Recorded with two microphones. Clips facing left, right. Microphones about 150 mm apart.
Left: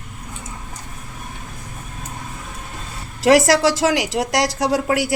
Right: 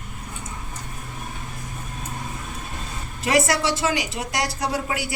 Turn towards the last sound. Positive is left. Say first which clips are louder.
# left 7 dB
turn(degrees=90)